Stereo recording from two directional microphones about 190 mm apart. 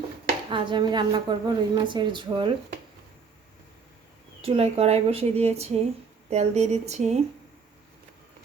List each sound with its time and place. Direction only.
0.5 s a woman's voice: 25° right (ahead or behind)
4.4 s speech: 30° right (ahead or behind)